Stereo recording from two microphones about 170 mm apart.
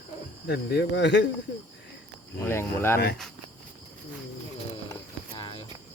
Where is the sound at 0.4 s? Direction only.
75° left (ahead or behind); by 1.2 s 90° left.